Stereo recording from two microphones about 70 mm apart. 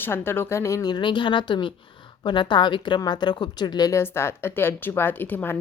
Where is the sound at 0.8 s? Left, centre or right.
Left.